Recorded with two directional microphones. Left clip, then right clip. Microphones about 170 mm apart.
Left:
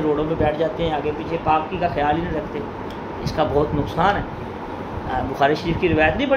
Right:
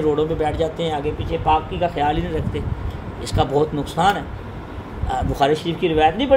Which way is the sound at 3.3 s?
60° right (ahead or behind).